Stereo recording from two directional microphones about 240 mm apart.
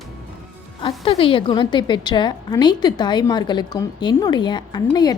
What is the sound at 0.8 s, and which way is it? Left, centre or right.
A woman's voice, left.